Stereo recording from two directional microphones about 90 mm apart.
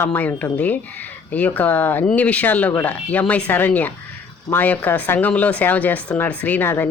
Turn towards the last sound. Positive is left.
turn(degrees=20)  # may be behind; listen again after turning